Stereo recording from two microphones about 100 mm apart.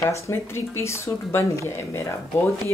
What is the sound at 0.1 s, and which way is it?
Speech, 25° left (ahead or behind).